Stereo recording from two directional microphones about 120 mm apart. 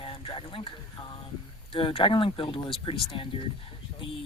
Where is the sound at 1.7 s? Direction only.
45° left (ahead or behind).